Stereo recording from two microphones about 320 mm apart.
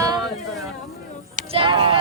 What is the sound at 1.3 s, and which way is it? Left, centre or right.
Speech, right.